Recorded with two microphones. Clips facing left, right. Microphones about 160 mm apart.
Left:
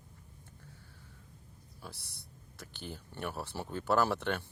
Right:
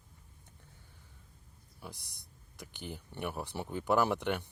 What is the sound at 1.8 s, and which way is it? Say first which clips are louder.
Speech: right 1 dB; 15° right (ahead or behind).